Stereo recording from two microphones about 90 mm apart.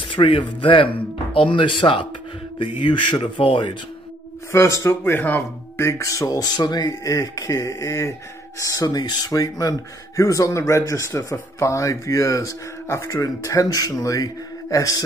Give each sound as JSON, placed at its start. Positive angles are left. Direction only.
{"t": 0.0, "sound": "speech", "side_deg": 70}
{"t": 4.5, "sound": "speech", "side_deg": 35}
{"t": 5.2, "sound": "speech", "side_deg": 20}
{"t": 5.9, "sound": "speech", "side_deg": 35}